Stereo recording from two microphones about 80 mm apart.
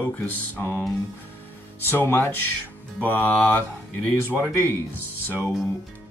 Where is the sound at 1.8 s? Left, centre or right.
Left.